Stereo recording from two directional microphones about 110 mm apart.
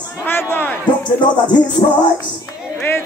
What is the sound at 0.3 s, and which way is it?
Speech, 20° left (ahead or behind).